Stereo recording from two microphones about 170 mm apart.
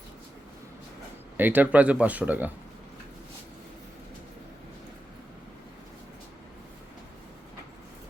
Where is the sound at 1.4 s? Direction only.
10° right (ahead or behind).